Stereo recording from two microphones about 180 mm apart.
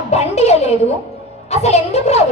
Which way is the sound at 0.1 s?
35° left (ahead or behind).